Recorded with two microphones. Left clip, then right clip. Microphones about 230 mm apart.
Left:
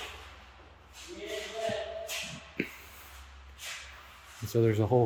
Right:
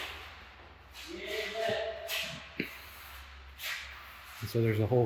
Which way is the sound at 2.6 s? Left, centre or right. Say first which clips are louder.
Left 3 dB; centre.